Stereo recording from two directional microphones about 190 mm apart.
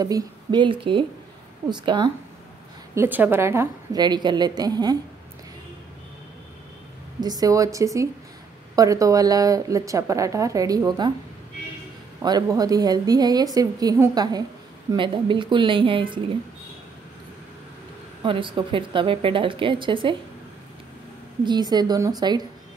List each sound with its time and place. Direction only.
0.0 s a woman's voice: 20° right (ahead or behind)
2.9 s a woman's voice: 10° right (ahead or behind)
7.2 s speech: 20° right (ahead or behind)
12.2 s a woman's voice: 20° right (ahead or behind)
18.2 s a woman's voice: 25° right (ahead or behind)
21.5 s a woman's voice: 20° right (ahead or behind)